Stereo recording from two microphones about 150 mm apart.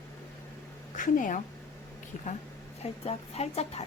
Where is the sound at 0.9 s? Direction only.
60° left (ahead or behind); by 3.8 s 45° left (ahead or behind).